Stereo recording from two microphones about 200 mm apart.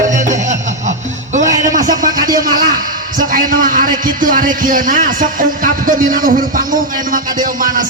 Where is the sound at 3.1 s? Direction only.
45° right (ahead or behind).